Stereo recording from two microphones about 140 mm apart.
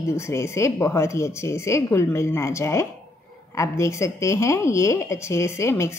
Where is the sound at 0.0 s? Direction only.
20° left (ahead or behind).